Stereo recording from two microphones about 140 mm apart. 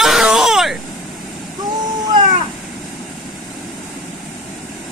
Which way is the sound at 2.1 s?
35° right (ahead or behind).